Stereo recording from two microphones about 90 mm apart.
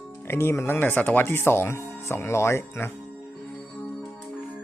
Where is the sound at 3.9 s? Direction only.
5° left (ahead or behind).